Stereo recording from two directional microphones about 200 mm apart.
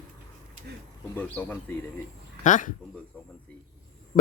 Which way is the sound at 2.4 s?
40° left (ahead or behind).